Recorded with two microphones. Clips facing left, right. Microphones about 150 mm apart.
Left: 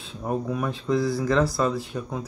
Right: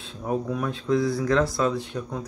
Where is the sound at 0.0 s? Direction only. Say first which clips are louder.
Even; centre (ahead or behind).